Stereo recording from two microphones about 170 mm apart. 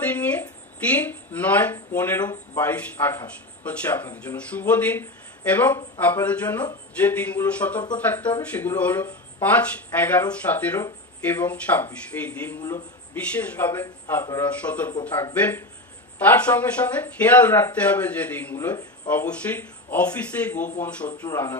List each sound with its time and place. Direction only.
0.4 s a man's voice: 10° left (ahead or behind); by 15.1 s 25° left (ahead or behind)
15.3 s speech: 10° left (ahead or behind)